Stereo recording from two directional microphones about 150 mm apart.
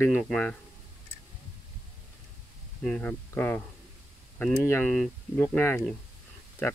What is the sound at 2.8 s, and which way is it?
Speech, 5° left (ahead or behind).